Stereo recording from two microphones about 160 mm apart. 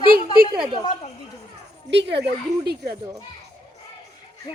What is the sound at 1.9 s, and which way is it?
Speech, 90° right.